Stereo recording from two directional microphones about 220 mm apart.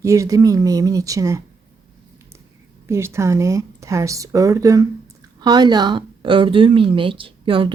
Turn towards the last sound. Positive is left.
turn(degrees=-25)  # may be behind; listen again after turning